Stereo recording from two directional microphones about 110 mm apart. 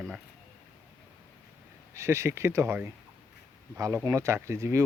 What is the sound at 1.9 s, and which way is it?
Speech, 25° right (ahead or behind).